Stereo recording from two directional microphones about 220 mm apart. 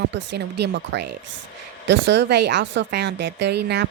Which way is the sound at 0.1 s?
55° right (ahead or behind).